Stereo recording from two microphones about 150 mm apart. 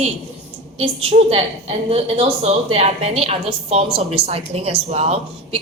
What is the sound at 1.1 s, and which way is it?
A woman's voice, 40° right (ahead or behind).